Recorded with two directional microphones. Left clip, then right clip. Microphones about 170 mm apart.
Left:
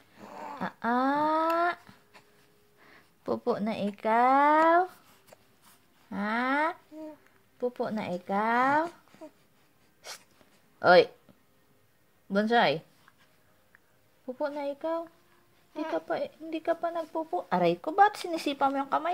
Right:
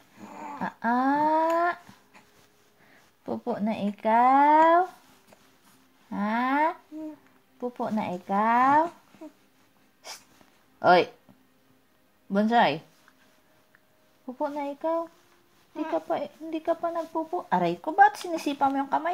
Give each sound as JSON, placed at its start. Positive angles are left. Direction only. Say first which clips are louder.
{"t": 0.2, "sound": "dog", "louder": "right 2 dB", "side_deg": 20}
{"t": 0.6, "sound": "a sound", "louder": "right 2 dB", "side_deg": 45}
{"t": 2.9, "sound": "speech", "louder": "left 2 dB", "side_deg": 45}
{"t": 6.0, "sound": "a sound", "louder": "right 2 dB", "side_deg": 40}
{"t": 7.6, "sound": "speech", "louder": "right 1 dB", "side_deg": 40}
{"t": 10.8, "sound": "speech", "louder": "even", "side_deg": 35}
{"t": 12.3, "sound": "speech", "louder": "right 2 dB", "side_deg": 35}
{"t": 14.2, "sound": "speech", "louder": "right 2 dB", "side_deg": 40}